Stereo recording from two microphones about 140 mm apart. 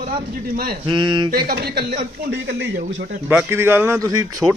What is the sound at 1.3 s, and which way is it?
Speech, 90° right.